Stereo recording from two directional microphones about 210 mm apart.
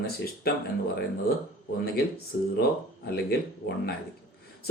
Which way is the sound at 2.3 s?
45° left (ahead or behind).